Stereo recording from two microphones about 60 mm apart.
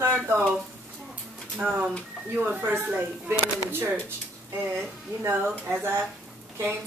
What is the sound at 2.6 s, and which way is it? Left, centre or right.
Speech, right.